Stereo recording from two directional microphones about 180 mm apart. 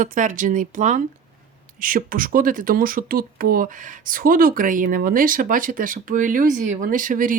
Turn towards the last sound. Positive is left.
turn(degrees=-50)  # may be behind; listen again after turning